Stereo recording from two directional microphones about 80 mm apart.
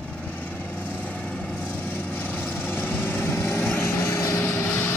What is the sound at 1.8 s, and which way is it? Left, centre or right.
Vehicle, left.